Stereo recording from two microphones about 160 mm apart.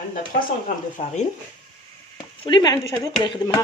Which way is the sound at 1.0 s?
40° left (ahead or behind).